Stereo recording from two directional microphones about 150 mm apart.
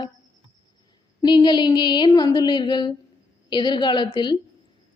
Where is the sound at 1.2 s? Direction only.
30° left (ahead or behind).